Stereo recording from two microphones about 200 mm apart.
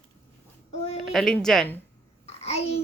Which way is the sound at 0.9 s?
Centre (ahead or behind).